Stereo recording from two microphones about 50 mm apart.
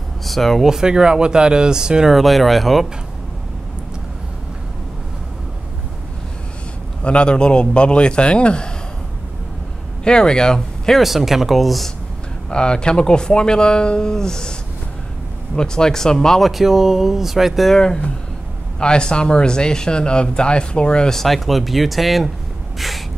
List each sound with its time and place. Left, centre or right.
0.2 s speech: centre
0.7 s speech: centre
2.1 s speech: centre
7.0 s a man's voice: left
10.0 s speech: centre
11.0 s speech: centre
12.4 s speech: centre
15.5 s speech: centre
16.3 s speech: centre
17.7 s speech: centre
21.2 s speech: centre
22.8 s a sound: centre